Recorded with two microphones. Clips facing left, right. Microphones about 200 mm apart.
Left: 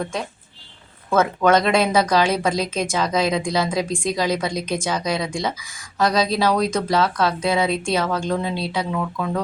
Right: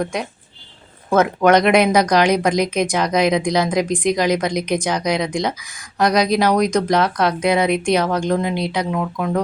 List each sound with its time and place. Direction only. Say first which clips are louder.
0.0 s speech: right 3 dB; 15° right (ahead or behind)